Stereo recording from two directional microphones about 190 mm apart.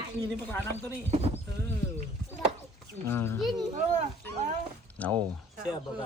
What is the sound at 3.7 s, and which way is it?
Dog, 40° right (ahead or behind).